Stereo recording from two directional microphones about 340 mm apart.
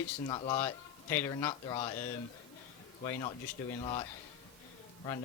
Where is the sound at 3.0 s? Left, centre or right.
Centre.